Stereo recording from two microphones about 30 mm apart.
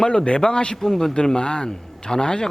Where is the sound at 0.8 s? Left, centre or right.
Centre.